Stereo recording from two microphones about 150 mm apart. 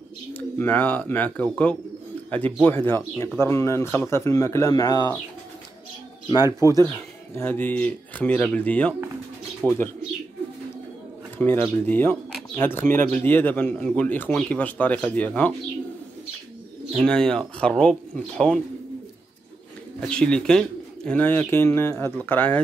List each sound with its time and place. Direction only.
0.3 s speech: 10° left (ahead or behind)
6.4 s speech: 20° right (ahead or behind)
7.3 s speech: 15° left (ahead or behind)
9.6 s speech: 5° right (ahead or behind)
11.3 s speech: 10° left (ahead or behind)
16.9 s speech: 5° left (ahead or behind)
20.0 s speech: 5° left (ahead or behind)